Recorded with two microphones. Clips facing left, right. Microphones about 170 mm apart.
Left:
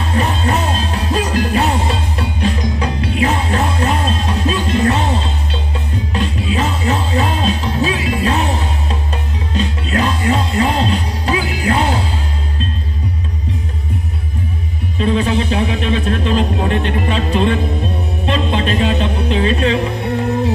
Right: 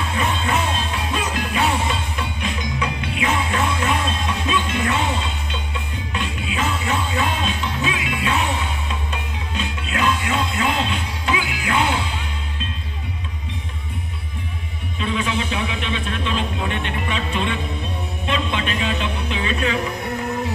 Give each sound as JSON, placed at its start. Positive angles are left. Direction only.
{"t": 0.0, "sound": "music", "side_deg": 35}
{"t": 15.0, "sound": "a sound", "side_deg": 35}
{"t": 18.2, "sound": "music", "side_deg": 35}